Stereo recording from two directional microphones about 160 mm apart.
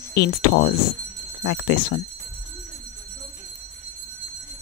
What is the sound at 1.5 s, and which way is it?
Speech, 90° left.